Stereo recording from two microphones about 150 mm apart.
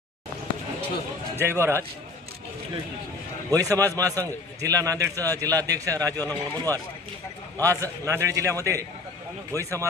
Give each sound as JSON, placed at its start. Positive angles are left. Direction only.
{"t": 1.4, "sound": "speech", "side_deg": -15}
{"t": 3.5, "sound": "a man's voice", "side_deg": -20}